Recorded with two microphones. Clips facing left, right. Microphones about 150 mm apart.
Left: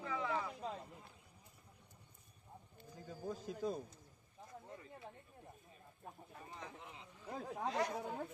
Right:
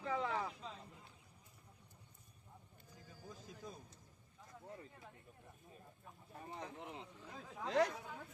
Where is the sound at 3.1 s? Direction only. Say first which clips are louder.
Left 11 dB; 70° left (ahead or behind).